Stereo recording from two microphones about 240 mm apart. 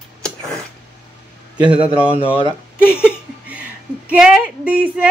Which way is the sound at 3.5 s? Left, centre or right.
Centre.